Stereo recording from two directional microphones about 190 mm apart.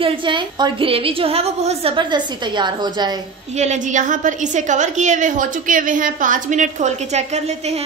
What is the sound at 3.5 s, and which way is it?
A woman's voice, 40° right (ahead or behind).